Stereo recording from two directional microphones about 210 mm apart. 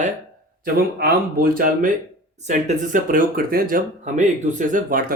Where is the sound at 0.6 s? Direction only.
45° right (ahead or behind).